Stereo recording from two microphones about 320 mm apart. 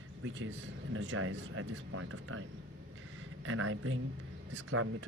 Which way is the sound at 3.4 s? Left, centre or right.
Right.